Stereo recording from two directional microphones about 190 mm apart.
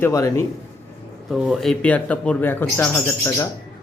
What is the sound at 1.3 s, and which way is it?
Speech, centre (ahead or behind).